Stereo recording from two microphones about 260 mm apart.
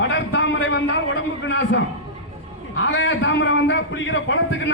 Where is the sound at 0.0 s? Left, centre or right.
Left.